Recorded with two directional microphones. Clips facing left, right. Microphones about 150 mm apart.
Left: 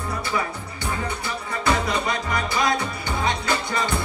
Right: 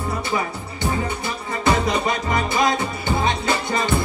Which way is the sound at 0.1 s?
25° right (ahead or behind).